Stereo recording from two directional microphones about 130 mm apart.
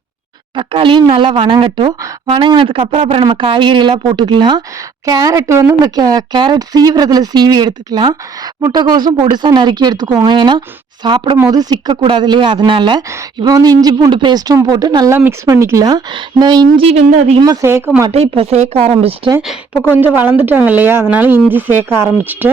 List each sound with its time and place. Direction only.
0.5 s speech: 40° right (ahead or behind)
3.2 s speech: 40° right (ahead or behind)
15.1 s speech: 20° right (ahead or behind)
17.1 s speech: 65° right (ahead or behind)
17.4 s speech: 25° right (ahead or behind)
18.1 s speech: 55° right (ahead or behind)
19.9 s a woman's voice: 15° right (ahead or behind)